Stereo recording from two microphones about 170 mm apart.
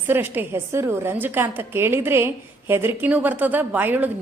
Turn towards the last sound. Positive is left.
turn(degrees=-10)  # may be behind; listen again after turning